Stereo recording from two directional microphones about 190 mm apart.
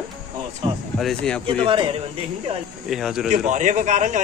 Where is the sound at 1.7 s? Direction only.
25° right (ahead or behind).